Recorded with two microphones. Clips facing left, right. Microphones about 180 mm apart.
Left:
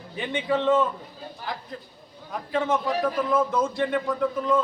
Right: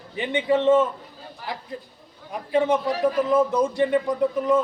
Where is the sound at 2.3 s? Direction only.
15° right (ahead or behind).